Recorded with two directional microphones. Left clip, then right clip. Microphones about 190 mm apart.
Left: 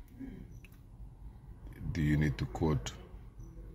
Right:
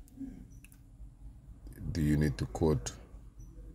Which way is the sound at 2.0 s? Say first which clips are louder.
Right 1 dB; 45° right (ahead or behind).